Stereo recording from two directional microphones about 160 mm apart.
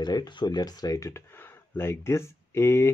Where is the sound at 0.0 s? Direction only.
25° left (ahead or behind).